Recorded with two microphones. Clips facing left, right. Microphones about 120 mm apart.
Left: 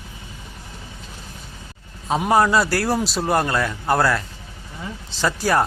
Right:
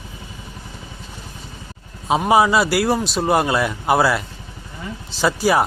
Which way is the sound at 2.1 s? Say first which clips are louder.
Right 2 dB; 10° right (ahead or behind).